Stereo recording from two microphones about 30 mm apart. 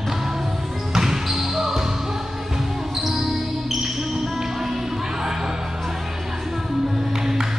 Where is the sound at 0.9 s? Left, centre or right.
Centre.